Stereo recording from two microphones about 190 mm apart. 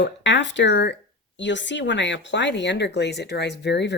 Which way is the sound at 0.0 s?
70° left (ahead or behind).